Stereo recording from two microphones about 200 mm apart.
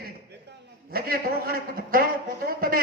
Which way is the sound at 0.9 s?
50° right (ahead or behind).